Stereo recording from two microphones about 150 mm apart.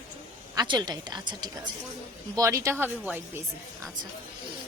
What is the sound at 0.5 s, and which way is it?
A woman's voice, 25° right (ahead or behind).